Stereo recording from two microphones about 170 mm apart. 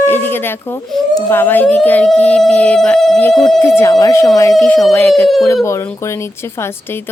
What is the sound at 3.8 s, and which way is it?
Speech, 20° left (ahead or behind).